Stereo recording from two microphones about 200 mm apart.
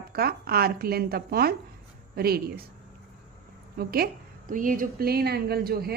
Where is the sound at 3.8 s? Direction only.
50° right (ahead or behind).